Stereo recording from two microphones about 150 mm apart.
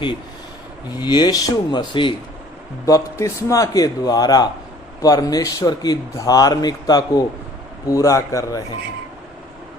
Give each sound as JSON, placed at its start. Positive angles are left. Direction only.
{"t": 0.9, "sound": "speech", "side_deg": 30}
{"t": 2.8, "sound": "speech", "side_deg": 20}